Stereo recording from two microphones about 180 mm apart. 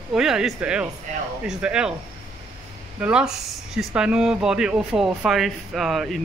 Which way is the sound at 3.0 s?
5° right (ahead or behind).